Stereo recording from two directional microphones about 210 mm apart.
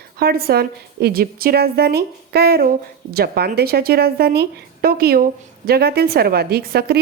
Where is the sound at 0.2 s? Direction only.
45° right (ahead or behind).